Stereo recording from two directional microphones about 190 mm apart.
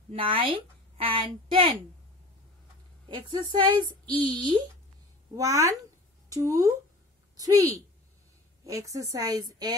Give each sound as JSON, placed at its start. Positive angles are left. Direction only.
{"t": 0.1, "sound": "a woman's voice", "side_deg": -25}
{"t": 3.1, "sound": "a woman's voice", "side_deg": -25}